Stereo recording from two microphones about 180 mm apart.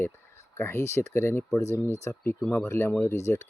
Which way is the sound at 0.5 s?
15° left (ahead or behind).